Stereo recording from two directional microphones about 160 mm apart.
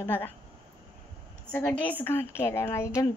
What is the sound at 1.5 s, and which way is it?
A woman's voice, 10° left (ahead or behind).